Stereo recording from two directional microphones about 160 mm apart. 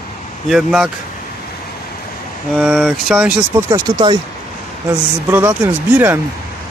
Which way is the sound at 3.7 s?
30° right (ahead or behind).